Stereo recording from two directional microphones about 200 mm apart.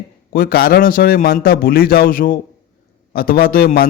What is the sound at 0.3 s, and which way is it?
A man's voice, 50° left (ahead or behind).